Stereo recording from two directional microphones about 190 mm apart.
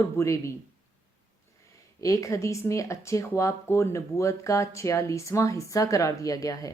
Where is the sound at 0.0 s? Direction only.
15° left (ahead or behind).